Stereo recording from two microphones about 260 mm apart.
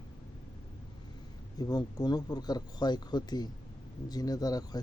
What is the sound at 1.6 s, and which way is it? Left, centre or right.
Speech, centre.